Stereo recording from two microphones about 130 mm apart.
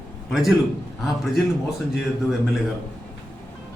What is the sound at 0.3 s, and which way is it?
A man's voice, centre (ahead or behind).